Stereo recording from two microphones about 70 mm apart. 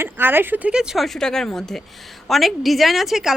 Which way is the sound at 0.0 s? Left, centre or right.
Right.